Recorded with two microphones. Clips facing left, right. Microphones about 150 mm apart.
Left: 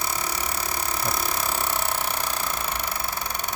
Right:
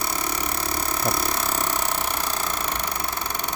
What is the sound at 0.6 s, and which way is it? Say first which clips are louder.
Burping: right 2 dB; 10° left (ahead or behind).